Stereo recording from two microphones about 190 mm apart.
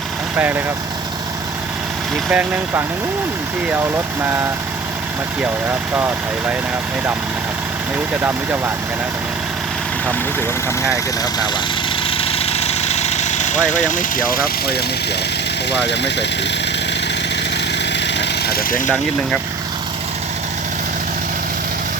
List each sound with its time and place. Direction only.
0.3 s speech: 10° right (ahead or behind)
2.3 s speech: 10° right (ahead or behind)
5.9 s speech: 10° right (ahead or behind)
8.2 s speech: 10° right (ahead or behind)
12.1 s engine: 30° left (ahead or behind); by 14.8 s 55° left (ahead or behind)
15.7 s speech: 65° left (ahead or behind)
17.9 s vehicle: 65° left (ahead or behind)